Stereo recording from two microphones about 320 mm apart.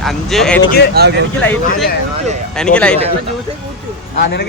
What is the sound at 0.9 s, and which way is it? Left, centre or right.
Speech, right.